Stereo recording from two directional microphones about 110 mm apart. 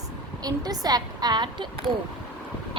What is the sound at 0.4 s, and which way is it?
A woman's voice, 35° right (ahead or behind).